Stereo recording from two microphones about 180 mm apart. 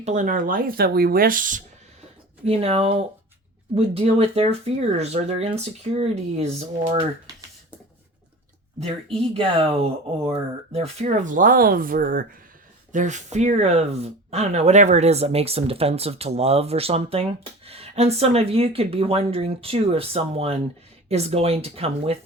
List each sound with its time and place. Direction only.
0.0 s speech: 40° right (ahead or behind)
2.4 s speech: 35° right (ahead or behind)
8.8 s speech: 30° right (ahead or behind)